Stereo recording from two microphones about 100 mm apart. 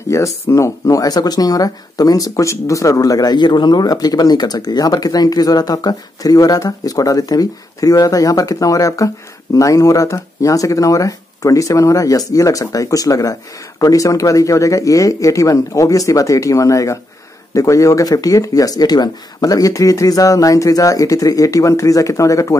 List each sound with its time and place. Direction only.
0.1 s speech: 30° left (ahead or behind)